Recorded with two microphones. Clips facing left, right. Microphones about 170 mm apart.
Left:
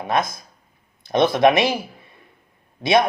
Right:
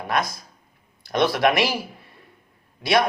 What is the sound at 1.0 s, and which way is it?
Speech, 20° left (ahead or behind).